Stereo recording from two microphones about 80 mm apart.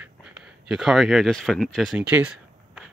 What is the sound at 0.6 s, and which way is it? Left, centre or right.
Speech, centre.